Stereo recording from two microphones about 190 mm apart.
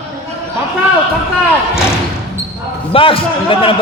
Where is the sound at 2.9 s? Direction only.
30° left (ahead or behind).